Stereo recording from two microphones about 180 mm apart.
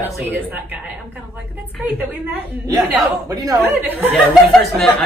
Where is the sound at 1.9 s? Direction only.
10° right (ahead or behind).